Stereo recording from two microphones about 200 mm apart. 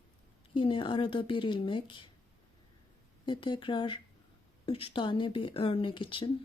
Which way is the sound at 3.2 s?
25° left (ahead or behind).